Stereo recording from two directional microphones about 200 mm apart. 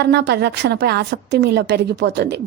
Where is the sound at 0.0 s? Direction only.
55° right (ahead or behind).